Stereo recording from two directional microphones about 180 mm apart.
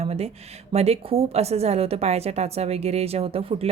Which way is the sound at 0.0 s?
35° right (ahead or behind).